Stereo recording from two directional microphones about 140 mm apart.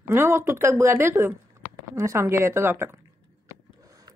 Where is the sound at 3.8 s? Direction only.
25° right (ahead or behind).